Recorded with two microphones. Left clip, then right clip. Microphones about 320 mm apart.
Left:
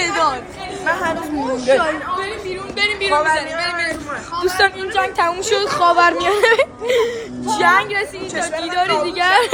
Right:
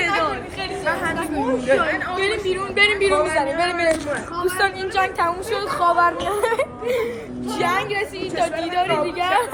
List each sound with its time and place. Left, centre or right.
1.7 s speech: left
2.7 s a woman's voice: right
4.4 s a woman's voice: centre
5.8 s speech: left
6.2 s a woman's voice: centre